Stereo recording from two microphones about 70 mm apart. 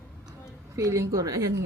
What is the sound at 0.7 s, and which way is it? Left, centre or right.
Speech, right.